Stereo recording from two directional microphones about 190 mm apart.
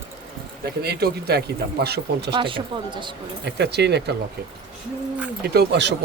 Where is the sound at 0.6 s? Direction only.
55° right (ahead or behind).